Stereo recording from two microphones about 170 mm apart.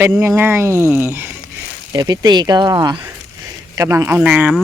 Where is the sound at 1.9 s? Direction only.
25° right (ahead or behind); by 4.6 s 5° right (ahead or behind).